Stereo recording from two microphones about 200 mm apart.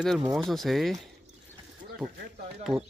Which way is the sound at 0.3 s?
Centre (ahead or behind).